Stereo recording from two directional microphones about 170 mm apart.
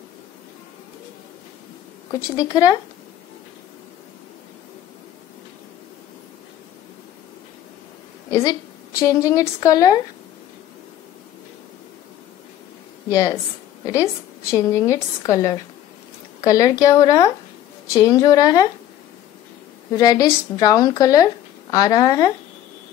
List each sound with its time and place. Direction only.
2.3 s a woman's voice: 20° left (ahead or behind)
8.3 s a woman's voice: 20° left (ahead or behind)
13.1 s a woman's voice: 20° left (ahead or behind)
20.0 s a woman's voice: 20° left (ahead or behind)